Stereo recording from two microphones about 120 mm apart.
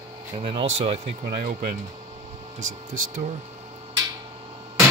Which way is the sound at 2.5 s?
90° right.